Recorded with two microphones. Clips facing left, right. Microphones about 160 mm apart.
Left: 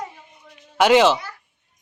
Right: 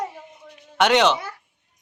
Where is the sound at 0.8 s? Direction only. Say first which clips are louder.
Left 3 dB; 5° left (ahead or behind).